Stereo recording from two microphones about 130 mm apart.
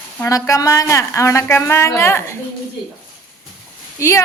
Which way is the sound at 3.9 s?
20° left (ahead or behind).